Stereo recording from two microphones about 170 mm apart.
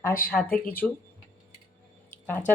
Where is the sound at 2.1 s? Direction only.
10° left (ahead or behind).